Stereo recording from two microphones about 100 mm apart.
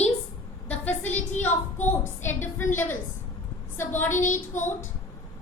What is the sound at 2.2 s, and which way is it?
Speech, 25° left (ahead or behind).